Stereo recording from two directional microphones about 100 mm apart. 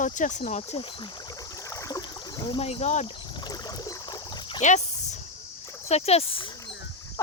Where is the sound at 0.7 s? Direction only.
60° left (ahead or behind); by 2.0 s 35° left (ahead or behind).